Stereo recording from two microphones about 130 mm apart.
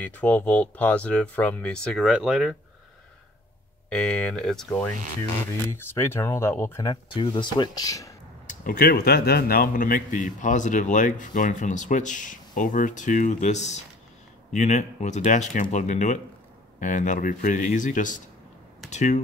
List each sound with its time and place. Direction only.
0.0 s speech: 10° left (ahead or behind)
3.9 s speech: 5° left (ahead or behind)
5.4 s speech: 20° left (ahead or behind)
7.2 s speech: 40° left (ahead or behind)
8.5 s speech: 90° left
18.9 s speech: 65° left (ahead or behind)